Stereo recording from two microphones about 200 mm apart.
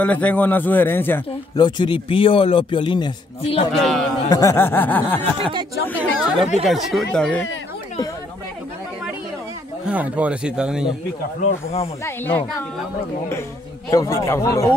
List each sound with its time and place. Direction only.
0.0 s a man's voice: 5° left (ahead or behind)
1.6 s a man's voice: 25° left (ahead or behind)
3.7 s speech: centre (ahead or behind)
4.3 s a man's voice: 15° left (ahead or behind)
9.8 s speech: 5° right (ahead or behind)
11.4 s speech: 30° left (ahead or behind)
12.0 s a man's voice: 10° left (ahead or behind)
13.8 s a man's voice: 15° left (ahead or behind)